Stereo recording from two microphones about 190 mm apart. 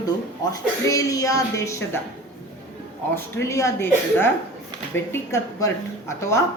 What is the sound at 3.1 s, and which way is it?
A woman's voice, 15° left (ahead or behind).